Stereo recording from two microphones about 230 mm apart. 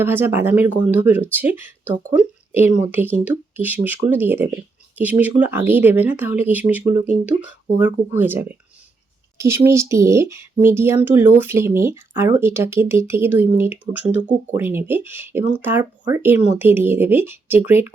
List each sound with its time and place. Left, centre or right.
0.0 s speech: centre